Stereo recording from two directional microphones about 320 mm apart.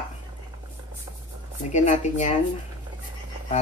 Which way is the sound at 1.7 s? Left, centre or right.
Left.